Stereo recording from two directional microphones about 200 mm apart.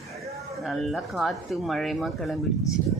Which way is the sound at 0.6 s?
Centre (ahead or behind).